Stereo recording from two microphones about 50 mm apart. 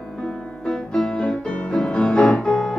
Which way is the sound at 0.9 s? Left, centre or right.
Left.